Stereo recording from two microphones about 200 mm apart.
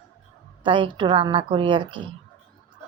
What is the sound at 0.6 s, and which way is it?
A woman's voice, 25° right (ahead or behind).